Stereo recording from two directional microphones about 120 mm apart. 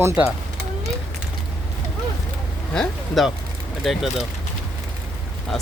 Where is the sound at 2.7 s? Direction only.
Centre (ahead or behind).